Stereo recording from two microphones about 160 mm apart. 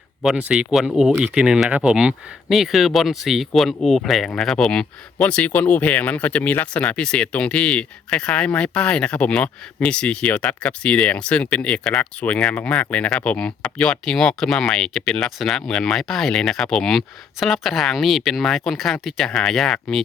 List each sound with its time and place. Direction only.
0.2 s speech: 5° right (ahead or behind)